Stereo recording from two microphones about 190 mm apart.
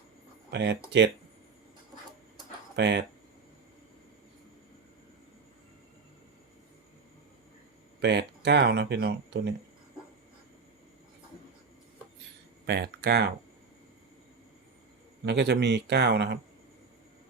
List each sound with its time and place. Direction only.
0.5 s speech: 65° right (ahead or behind)
2.7 s speech: 65° right (ahead or behind)
8.0 s speech: 65° right (ahead or behind)
12.6 s speech: 60° right (ahead or behind)
15.2 s speech: 65° right (ahead or behind)